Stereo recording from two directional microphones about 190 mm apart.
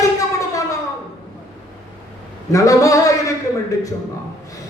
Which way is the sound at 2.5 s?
15° left (ahead or behind).